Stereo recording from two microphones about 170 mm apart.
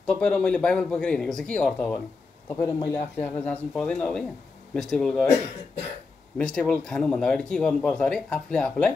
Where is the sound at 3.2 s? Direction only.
10° left (ahead or behind).